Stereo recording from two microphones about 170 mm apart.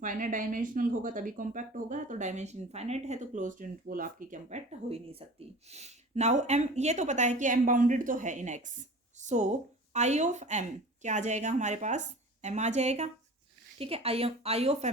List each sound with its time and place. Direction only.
0.0 s a woman's voice: 50° right (ahead or behind)